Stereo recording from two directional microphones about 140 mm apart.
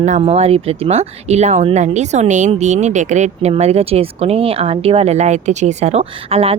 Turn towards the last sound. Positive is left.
turn(degrees=-45)  # may be behind; listen again after turning